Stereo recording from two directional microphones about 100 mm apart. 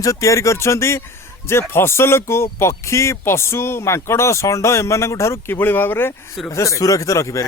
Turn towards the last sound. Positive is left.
turn(degrees=30)  # may be behind; listen again after turning